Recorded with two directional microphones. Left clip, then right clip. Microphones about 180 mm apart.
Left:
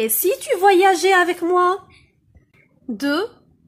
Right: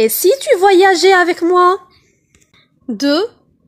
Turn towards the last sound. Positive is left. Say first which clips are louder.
# right 7 dB
turn(degrees=-25)  # may be behind; listen again after turning